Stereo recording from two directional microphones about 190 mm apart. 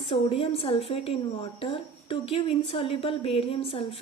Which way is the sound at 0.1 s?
30° left (ahead or behind).